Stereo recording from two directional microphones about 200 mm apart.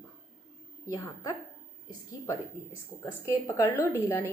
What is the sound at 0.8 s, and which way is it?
Speech, 15° left (ahead or behind).